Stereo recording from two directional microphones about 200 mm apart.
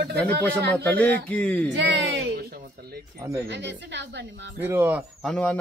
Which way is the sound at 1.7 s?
60° right (ahead or behind).